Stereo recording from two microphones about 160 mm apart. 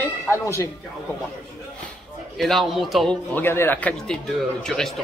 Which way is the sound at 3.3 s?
15° left (ahead or behind).